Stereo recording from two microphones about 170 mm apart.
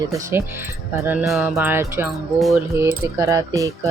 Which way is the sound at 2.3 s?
Centre (ahead or behind).